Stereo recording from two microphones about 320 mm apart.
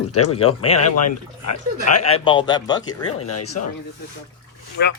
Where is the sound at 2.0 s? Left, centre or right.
Centre.